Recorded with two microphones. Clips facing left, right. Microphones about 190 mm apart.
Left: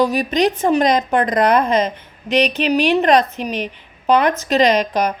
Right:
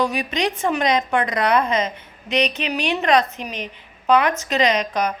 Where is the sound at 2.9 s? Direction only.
35° left (ahead or behind).